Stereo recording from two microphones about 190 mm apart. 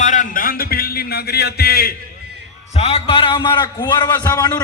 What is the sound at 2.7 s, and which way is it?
A man's voice, 30° left (ahead or behind).